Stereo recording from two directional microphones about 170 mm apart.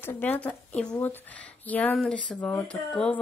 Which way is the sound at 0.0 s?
10° left (ahead or behind).